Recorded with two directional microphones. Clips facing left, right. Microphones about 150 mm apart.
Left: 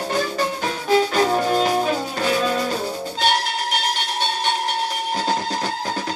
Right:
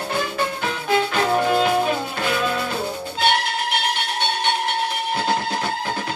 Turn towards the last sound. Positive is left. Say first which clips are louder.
# even
turn(degrees=40)  # may be behind; listen again after turning